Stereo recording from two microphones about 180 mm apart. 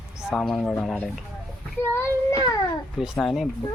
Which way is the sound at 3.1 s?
5° left (ahead or behind).